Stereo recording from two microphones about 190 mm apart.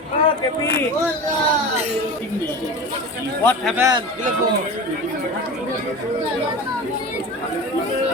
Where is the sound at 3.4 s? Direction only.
Centre (ahead or behind).